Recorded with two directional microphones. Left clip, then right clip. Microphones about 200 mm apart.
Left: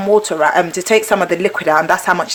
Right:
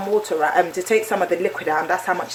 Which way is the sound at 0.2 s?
40° left (ahead or behind).